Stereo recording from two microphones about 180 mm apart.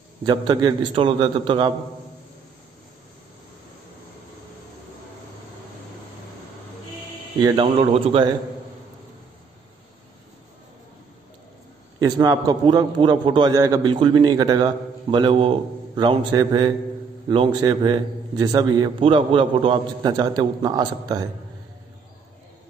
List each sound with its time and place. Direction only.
0.2 s a man's voice: 25° right (ahead or behind)
7.3 s a man's voice: 20° right (ahead or behind)
7.7 s a man's voice: 35° right (ahead or behind)
12.0 s a man's voice: 20° right (ahead or behind)